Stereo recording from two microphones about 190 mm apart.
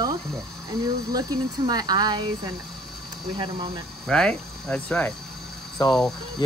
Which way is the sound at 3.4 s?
25° right (ahead or behind).